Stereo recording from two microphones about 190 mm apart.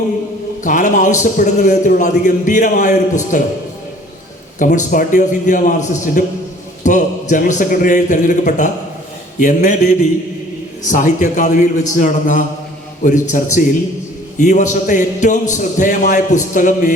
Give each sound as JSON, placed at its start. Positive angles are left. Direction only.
{"t": 0.6, "sound": "a man's voice", "side_deg": 40}
{"t": 4.6, "sound": "a man's voice", "side_deg": 40}